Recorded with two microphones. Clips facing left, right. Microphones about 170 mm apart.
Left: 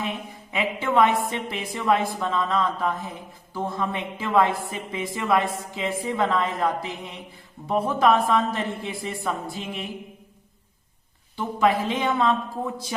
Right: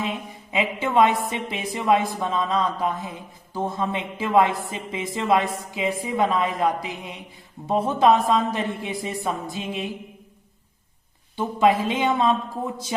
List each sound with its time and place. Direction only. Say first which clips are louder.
0.0 s a woman's voice: right 2 dB; 20° right (ahead or behind)
11.3 s speech: right 2 dB; 20° right (ahead or behind)